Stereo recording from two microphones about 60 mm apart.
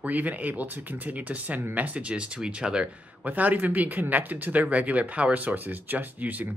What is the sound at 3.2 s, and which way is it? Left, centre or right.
Speech, right.